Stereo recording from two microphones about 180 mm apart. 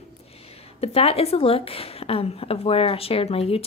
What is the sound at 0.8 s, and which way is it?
A woman's voice, 35° left (ahead or behind).